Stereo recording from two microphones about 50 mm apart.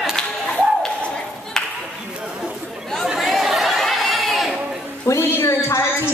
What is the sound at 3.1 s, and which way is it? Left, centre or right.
Chatter, centre.